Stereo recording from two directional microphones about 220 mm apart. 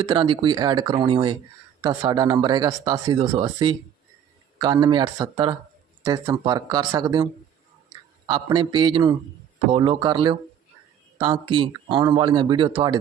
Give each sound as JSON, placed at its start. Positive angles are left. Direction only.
{"t": 0.0, "sound": "speech", "side_deg": -20}
{"t": 8.3, "sound": "speech", "side_deg": -20}